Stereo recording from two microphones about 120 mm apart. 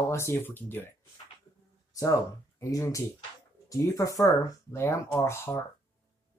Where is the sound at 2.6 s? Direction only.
25° left (ahead or behind).